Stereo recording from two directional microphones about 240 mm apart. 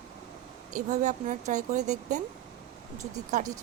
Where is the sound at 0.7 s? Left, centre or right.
Right.